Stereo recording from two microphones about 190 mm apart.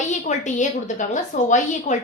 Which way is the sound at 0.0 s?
40° left (ahead or behind).